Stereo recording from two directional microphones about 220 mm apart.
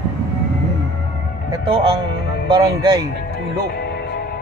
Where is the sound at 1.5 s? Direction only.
25° right (ahead or behind).